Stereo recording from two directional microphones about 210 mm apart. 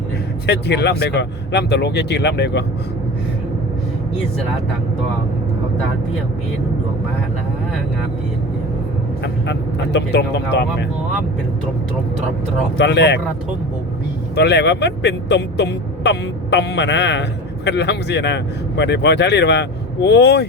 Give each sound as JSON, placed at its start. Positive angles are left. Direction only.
{"t": 0.4, "sound": "speech", "side_deg": 55}
{"t": 9.2, "sound": "speech", "side_deg": 55}
{"t": 12.7, "sound": "speech", "side_deg": 55}
{"t": 14.3, "sound": "speech", "side_deg": 55}